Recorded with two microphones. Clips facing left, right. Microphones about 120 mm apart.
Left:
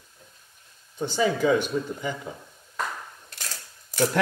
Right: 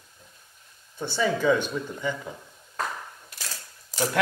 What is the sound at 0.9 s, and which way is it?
Speech, 15° left (ahead or behind).